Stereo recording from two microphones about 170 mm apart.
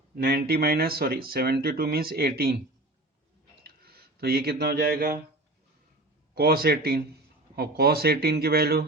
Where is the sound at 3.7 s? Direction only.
65° right (ahead or behind).